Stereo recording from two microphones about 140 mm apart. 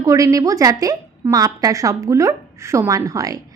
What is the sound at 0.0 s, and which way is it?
A woman's voice, 25° right (ahead or behind).